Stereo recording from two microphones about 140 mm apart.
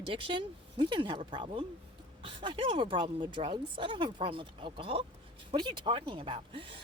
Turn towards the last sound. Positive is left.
turn(degrees=-40)  # may be behind; listen again after turning